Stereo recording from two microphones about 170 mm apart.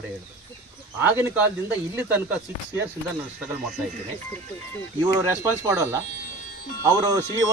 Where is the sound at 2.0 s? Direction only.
10° right (ahead or behind).